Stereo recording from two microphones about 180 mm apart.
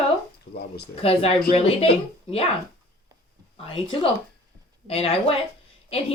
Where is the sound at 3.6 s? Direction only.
30° left (ahead or behind).